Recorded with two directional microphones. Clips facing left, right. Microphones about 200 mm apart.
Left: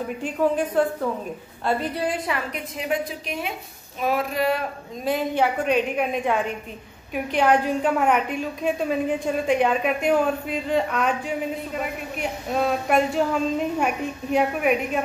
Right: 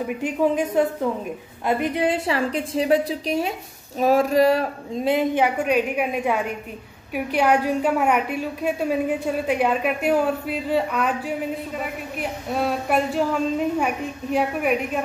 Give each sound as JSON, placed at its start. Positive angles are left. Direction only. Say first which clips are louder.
{"t": 0.2, "sound": "a woman's voice", "louder": "right 1 dB", "side_deg": -10}
{"t": 4.0, "sound": "a sound", "louder": "right 6 dB", "side_deg": -40}
{"t": 5.0, "sound": "a woman's voice", "louder": "right 2 dB", "side_deg": -20}